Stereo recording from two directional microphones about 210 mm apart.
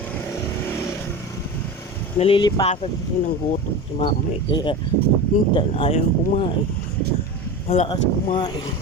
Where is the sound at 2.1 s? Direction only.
25° left (ahead or behind).